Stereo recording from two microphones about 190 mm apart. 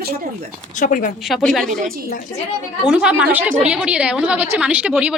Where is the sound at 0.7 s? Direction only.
45° left (ahead or behind).